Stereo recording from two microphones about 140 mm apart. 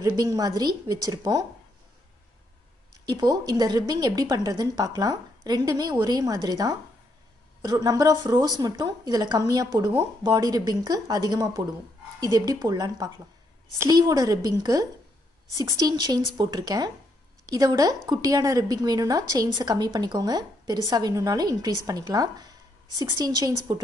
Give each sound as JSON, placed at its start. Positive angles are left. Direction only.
{"t": 0.0, "sound": "a woman's voice", "side_deg": -25}
{"t": 3.1, "sound": "a woman's voice", "side_deg": -30}
{"t": 15.9, "sound": "a woman's voice", "side_deg": -25}